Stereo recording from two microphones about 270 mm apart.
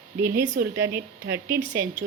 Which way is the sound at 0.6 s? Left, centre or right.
Right.